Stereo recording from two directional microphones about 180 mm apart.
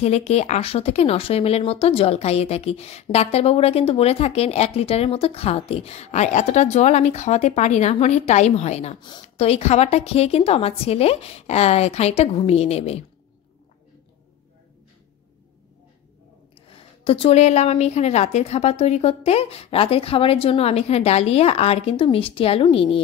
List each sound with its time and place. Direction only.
0.0 s speech: 35° left (ahead or behind)
16.7 s speech: 30° left (ahead or behind)